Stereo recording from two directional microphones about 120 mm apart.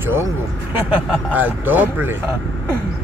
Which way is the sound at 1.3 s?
15° right (ahead or behind).